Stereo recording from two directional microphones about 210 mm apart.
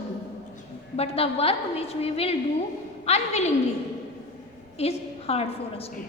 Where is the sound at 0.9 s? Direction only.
30° left (ahead or behind).